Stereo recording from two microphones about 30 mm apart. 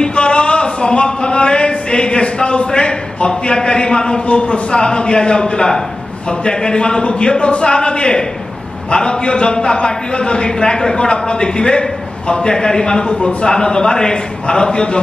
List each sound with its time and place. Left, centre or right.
0.0 s speech: left
4.3 s a man's voice: left